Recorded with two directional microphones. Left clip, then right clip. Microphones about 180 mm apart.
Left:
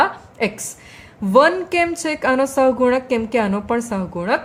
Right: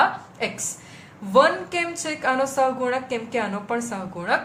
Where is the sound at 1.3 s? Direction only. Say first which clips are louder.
Left 4 dB; 45° left (ahead or behind).